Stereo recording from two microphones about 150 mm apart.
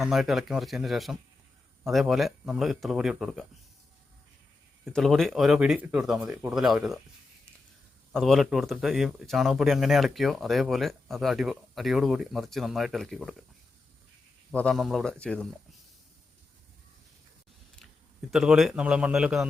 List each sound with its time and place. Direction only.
0.0 s speech: centre (ahead or behind)
4.9 s speech: 5° left (ahead or behind)
8.1 s speech: centre (ahead or behind)
14.5 s speech: 5° left (ahead or behind)
18.3 s speech: centre (ahead or behind)